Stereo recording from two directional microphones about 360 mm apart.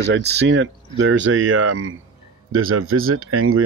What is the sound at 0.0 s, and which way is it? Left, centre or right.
Speech, right.